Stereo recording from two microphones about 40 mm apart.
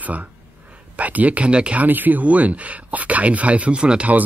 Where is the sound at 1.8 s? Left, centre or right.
Right.